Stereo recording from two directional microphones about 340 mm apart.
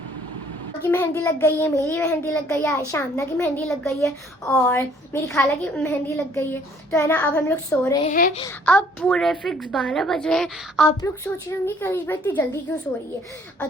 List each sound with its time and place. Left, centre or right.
0.8 s a woman's voice: centre
8.0 s speech: left
8.6 s a woman's voice: centre